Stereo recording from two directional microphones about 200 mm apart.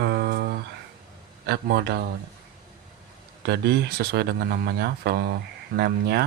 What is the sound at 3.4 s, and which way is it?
Speech, 55° right (ahead or behind).